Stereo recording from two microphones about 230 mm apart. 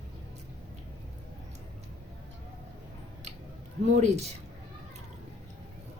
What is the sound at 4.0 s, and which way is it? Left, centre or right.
Speech, right.